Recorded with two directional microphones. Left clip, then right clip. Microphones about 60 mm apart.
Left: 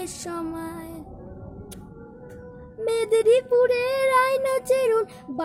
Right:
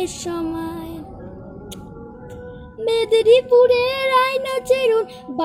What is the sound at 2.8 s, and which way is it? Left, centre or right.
Child singing, left.